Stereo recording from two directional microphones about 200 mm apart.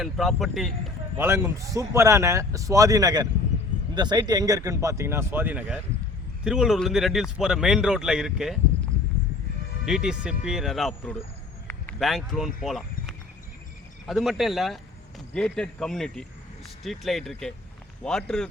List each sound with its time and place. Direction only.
0.0 s speech: centre (ahead or behind)
1.2 s speech: 10° right (ahead or behind)
9.8 s speech: 5° right (ahead or behind)